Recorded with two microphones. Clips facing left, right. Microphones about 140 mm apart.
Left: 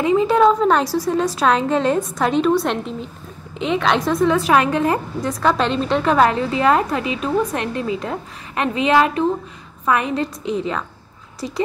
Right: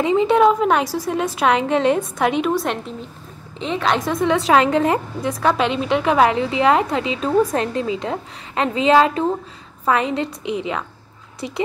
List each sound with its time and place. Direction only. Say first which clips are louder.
0.0 s a woman's voice: even; 25° right (ahead or behind)
3.6 s a woman's voice: left 2 dB; centre (ahead or behind)
4.0 s a woman's voice: left 2 dB; 20° right (ahead or behind)